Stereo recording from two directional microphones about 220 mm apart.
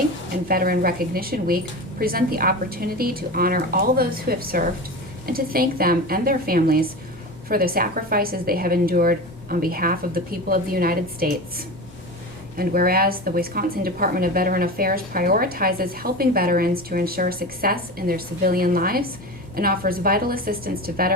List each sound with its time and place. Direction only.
0.4 s a woman's voice: 40° right (ahead or behind)